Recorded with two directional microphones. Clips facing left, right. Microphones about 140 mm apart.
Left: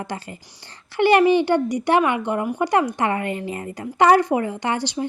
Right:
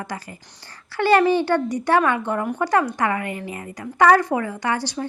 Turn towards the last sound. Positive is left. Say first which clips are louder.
# left 1 dB
turn(degrees=20)  # may be behind; listen again after turning